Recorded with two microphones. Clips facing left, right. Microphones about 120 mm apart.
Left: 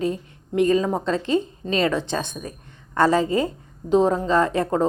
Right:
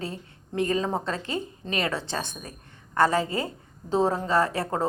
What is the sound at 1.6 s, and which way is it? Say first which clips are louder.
Speech: left 4 dB; 20° right (ahead or behind).